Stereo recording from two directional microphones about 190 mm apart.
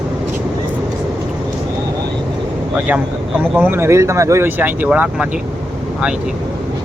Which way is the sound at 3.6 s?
10° right (ahead or behind).